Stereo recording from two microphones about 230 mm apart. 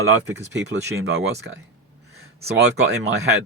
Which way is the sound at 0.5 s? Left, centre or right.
Right.